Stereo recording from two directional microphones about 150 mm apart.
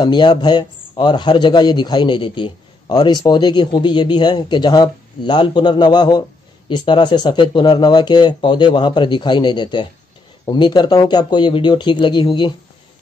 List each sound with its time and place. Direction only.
0.0 s a man's voice: 30° left (ahead or behind)